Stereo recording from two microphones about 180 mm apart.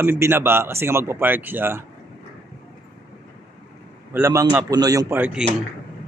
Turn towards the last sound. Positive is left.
turn(degrees=-5)  # may be behind; listen again after turning